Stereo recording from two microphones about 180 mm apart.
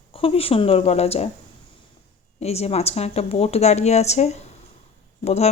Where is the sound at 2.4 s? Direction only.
35° left (ahead or behind).